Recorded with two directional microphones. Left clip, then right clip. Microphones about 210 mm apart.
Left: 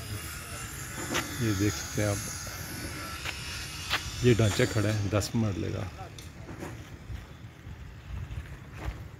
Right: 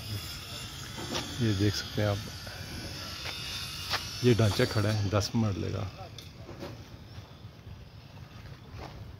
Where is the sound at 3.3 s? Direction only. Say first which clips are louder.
Right 1 dB; 55° right (ahead or behind).